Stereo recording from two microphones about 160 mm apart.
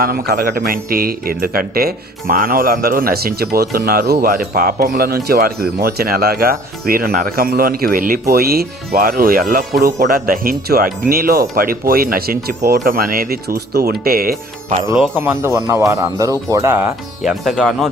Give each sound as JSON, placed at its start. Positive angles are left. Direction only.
{"t": 0.0, "sound": "a man's voice", "side_deg": -70}
{"t": 15.2, "sound": "speech", "side_deg": -15}
{"t": 17.2, "sound": "speech", "side_deg": 0}